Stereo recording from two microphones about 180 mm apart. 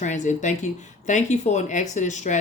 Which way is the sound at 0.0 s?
40° left (ahead or behind).